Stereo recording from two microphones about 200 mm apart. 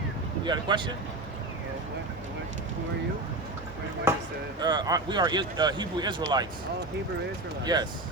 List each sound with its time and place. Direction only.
0.4 s speech: 25° right (ahead or behind)
4.1 s speech: 15° right (ahead or behind)
7.6 s speech: 20° right (ahead or behind)